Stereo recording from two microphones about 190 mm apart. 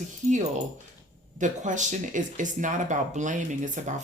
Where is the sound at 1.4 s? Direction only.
40° right (ahead or behind).